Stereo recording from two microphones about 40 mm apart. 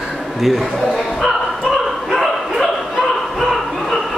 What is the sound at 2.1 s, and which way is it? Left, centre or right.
Bow-wow, centre.